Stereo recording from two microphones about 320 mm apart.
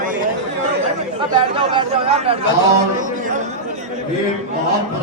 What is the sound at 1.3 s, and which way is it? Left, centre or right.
Speech, centre.